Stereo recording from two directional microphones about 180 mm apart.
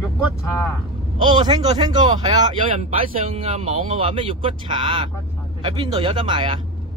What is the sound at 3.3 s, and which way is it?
Speech, 35° right (ahead or behind).